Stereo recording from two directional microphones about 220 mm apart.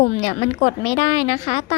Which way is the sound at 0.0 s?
30° left (ahead or behind).